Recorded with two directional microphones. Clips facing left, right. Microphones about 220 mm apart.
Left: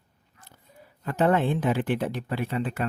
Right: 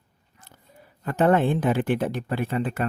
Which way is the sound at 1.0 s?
50° right (ahead or behind).